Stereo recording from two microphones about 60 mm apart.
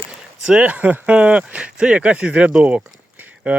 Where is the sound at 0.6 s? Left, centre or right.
Right.